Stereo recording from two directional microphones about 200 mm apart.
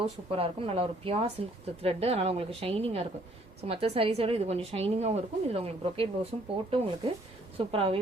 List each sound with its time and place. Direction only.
0.0 s a woman's voice: 30° right (ahead or behind)